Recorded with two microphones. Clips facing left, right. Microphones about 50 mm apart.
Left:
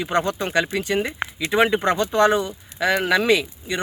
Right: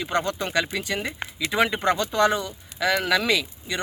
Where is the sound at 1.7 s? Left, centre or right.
Centre.